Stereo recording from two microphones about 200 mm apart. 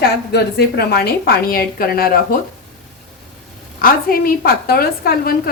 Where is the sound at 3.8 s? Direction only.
45° left (ahead or behind).